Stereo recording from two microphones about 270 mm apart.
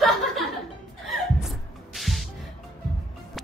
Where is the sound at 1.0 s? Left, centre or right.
Centre.